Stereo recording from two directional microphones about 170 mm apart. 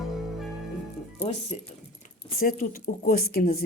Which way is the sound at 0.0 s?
Centre (ahead or behind).